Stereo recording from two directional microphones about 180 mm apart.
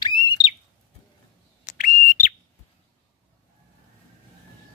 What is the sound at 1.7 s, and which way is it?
Bird, 45° left (ahead or behind).